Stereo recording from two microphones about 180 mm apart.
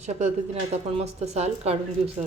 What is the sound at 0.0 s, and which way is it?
Speech, 40° right (ahead or behind).